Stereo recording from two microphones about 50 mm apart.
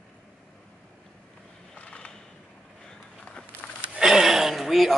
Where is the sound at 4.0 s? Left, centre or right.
Centre.